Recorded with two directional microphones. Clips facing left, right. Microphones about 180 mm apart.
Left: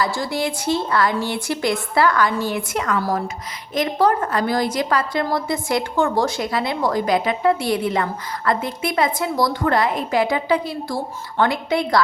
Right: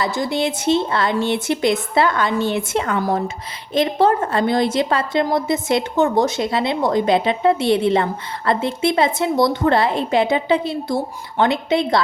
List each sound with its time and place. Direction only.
0.0 s a woman's voice: 20° right (ahead or behind)